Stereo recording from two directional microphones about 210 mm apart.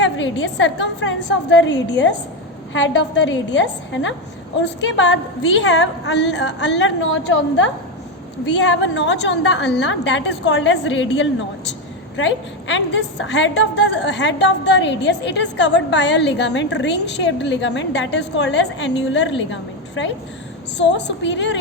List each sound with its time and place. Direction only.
0.0 s a woman's voice: 60° left (ahead or behind)
20.7 s a woman's voice: 55° left (ahead or behind)